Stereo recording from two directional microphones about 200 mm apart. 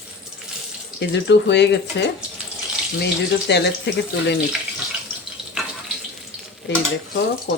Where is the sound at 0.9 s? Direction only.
60° left (ahead or behind).